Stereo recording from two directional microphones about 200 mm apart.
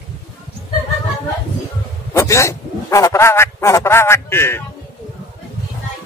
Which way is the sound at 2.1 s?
15° left (ahead or behind).